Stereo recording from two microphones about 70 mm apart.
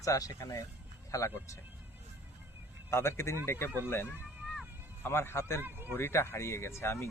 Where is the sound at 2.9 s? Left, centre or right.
Left.